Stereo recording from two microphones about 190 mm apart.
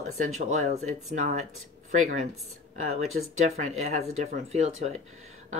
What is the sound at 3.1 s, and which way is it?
Speech, 40° right (ahead or behind).